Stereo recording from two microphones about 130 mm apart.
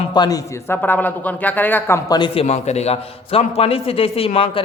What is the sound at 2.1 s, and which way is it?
Speech, 35° left (ahead or behind).